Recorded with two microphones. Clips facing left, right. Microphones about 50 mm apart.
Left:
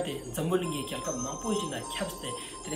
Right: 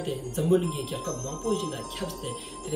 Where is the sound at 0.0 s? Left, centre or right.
Left.